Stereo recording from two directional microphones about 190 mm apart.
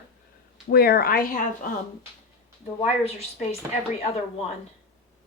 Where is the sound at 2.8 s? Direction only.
35° left (ahead or behind).